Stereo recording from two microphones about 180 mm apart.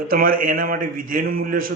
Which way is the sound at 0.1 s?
50° right (ahead or behind).